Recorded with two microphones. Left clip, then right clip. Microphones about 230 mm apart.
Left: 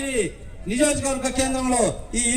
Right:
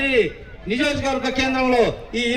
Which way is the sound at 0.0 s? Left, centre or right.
Left.